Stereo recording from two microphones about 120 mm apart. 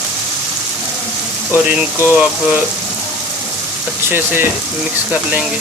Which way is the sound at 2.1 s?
10° right (ahead or behind).